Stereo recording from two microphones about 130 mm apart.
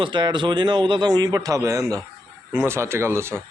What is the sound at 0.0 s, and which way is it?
A man's voice, 35° right (ahead or behind).